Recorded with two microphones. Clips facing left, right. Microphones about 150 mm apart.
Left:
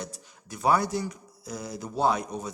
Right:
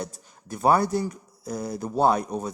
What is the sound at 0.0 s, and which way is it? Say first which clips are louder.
Speech: right 4 dB; 50° right (ahead or behind).